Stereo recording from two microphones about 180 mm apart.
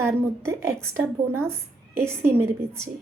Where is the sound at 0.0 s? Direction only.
15° right (ahead or behind).